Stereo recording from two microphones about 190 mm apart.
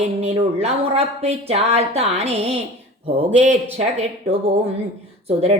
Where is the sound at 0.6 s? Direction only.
35° right (ahead or behind).